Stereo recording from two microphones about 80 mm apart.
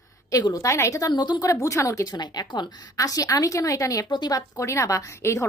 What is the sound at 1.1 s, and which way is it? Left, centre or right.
Speech, left.